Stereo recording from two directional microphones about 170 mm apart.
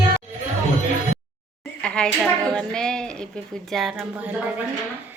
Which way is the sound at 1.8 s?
5° left (ahead or behind).